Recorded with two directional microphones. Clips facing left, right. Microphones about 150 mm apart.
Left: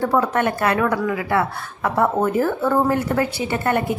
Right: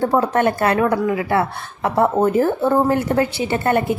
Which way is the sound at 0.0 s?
30° right (ahead or behind).